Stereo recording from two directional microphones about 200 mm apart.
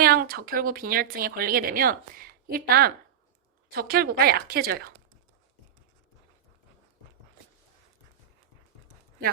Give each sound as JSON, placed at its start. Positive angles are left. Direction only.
{"t": 0.0, "sound": "a woman's voice", "side_deg": -50}